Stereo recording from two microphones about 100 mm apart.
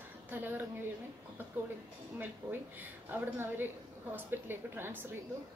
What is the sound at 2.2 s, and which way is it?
A woman's voice, 20° right (ahead or behind).